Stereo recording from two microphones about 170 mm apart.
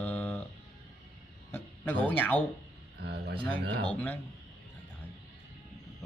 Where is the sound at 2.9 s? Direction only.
75° right (ahead or behind).